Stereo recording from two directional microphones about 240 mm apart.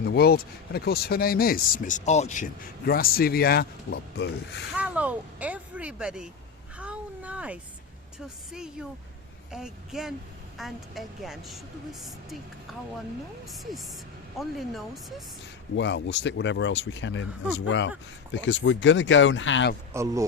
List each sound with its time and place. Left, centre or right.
0.0 s speech: left
4.7 s a sound: centre
8.5 s a woman's voice: centre
13.5 s a woman's voice: centre
15.7 s speech: left
19.9 s speech: centre